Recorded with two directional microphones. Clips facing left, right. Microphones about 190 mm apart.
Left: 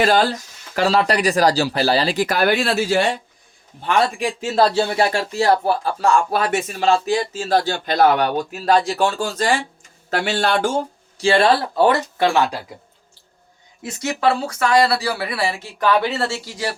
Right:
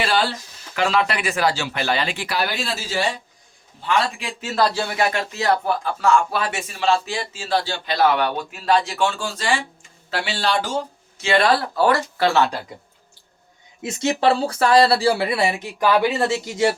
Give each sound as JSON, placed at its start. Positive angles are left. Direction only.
{"t": 0.0, "sound": "speech", "side_deg": 45}
{"t": 4.2, "sound": "speech", "side_deg": 30}
{"t": 11.2, "sound": "speech", "side_deg": 30}
{"t": 13.8, "sound": "speech", "side_deg": -25}